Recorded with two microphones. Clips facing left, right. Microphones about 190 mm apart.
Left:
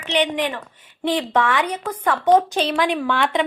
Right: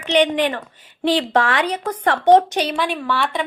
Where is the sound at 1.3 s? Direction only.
80° right.